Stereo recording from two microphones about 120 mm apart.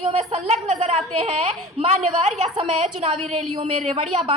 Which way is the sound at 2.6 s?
45° right (ahead or behind).